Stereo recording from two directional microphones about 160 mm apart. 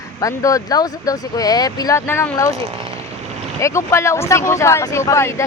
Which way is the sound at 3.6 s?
15° left (ahead or behind).